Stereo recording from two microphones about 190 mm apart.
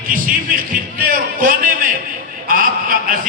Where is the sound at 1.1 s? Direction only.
45° right (ahead or behind).